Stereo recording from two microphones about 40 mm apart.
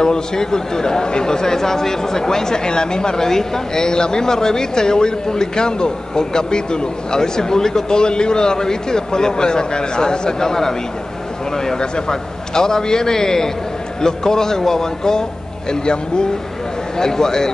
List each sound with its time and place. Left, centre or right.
0.0 s speech: centre